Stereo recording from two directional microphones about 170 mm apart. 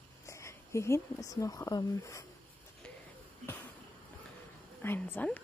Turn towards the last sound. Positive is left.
turn(degrees=10)  # may be behind; listen again after turning